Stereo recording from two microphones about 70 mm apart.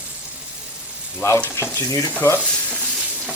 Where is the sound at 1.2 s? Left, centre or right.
Left.